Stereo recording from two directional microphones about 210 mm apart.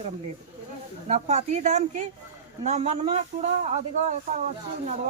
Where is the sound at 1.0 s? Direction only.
30° right (ahead or behind).